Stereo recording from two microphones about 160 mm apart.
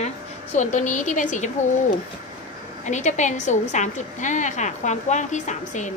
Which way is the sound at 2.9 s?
50° left (ahead or behind).